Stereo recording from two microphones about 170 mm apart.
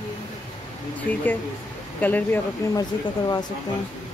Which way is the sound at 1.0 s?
10° left (ahead or behind).